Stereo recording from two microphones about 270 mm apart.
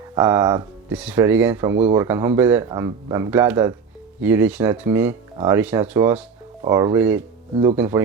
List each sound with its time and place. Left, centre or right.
0.1 s speech: centre
7.5 s speech: right
7.8 s speech: centre